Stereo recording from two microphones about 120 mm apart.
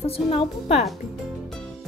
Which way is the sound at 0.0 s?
55° left (ahead or behind).